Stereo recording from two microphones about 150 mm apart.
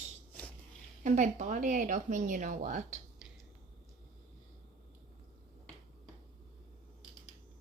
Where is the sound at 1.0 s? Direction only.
55° right (ahead or behind).